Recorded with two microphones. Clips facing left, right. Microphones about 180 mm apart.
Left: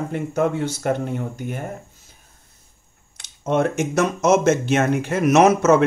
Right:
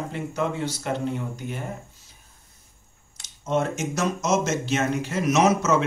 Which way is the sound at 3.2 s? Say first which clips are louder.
Left 5 dB; 60° left (ahead or behind).